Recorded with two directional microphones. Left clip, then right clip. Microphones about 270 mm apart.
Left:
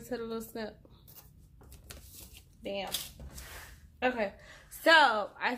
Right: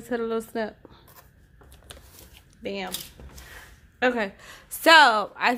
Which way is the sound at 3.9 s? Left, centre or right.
Right.